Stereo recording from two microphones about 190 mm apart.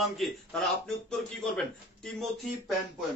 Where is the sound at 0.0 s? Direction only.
Centre (ahead or behind).